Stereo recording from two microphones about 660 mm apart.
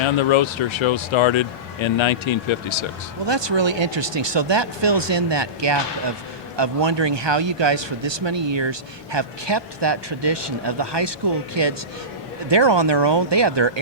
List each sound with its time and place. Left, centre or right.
0.0 s speech: left
3.2 s speech: right